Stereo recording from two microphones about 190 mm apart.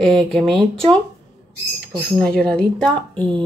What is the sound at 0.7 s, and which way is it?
Speech, 25° right (ahead or behind).